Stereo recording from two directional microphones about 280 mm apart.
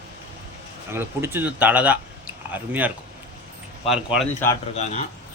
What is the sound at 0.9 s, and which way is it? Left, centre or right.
Speech, centre.